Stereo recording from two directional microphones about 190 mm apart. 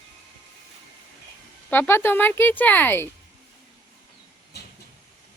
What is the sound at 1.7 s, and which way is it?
Speech, 10° left (ahead or behind).